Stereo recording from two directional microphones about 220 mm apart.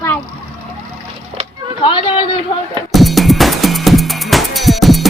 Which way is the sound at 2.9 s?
Centre (ahead or behind).